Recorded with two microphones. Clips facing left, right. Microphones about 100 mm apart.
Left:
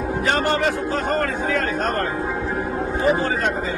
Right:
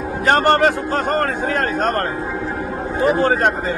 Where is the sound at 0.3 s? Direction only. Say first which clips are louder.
Right 7 dB; 55° right (ahead or behind).